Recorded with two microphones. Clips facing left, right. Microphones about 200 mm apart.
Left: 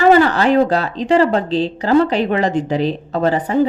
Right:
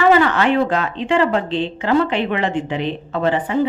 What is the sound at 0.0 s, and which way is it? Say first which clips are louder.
Speech: left 3 dB; 35° left (ahead or behind).